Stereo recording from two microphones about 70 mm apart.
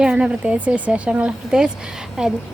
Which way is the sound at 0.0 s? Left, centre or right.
Centre.